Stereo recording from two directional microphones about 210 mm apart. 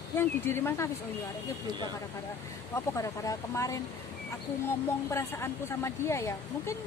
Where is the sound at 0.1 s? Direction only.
10° left (ahead or behind).